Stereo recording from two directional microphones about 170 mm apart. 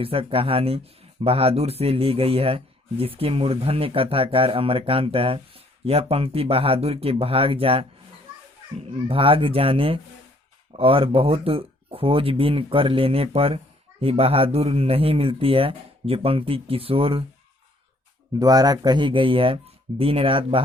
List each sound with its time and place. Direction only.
0.0 s speech: 35° right (ahead or behind)
9.0 s speech: 30° right (ahead or behind)
18.3 s speech: 20° right (ahead or behind)